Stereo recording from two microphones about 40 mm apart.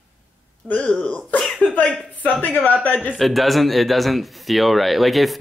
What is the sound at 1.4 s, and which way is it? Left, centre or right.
Speech, centre.